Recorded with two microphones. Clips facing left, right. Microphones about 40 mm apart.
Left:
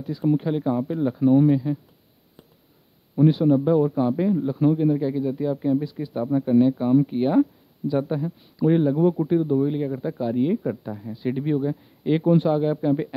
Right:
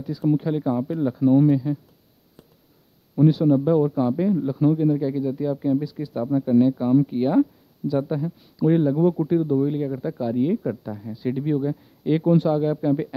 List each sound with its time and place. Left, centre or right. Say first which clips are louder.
0.0 s a man's voice: even; centre
3.3 s a man's voice: even; left
3.5 s a man's voice: even; centre